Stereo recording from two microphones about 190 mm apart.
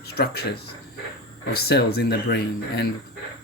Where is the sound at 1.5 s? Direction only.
55° left (ahead or behind).